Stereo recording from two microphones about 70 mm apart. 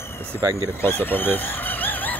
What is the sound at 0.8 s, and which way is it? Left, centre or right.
Speech, left.